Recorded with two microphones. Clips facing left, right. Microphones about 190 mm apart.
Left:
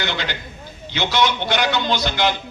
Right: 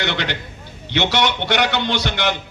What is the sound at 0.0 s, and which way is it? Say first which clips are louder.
A man's voice: right 2 dB; 65° right (ahead or behind).